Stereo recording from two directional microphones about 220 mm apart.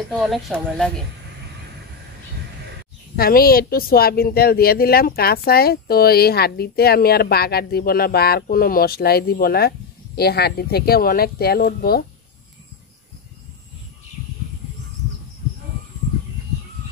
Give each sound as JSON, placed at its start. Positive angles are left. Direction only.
{"t": 0.2, "sound": "speech", "side_deg": 0}
{"t": 3.2, "sound": "speech", "side_deg": 40}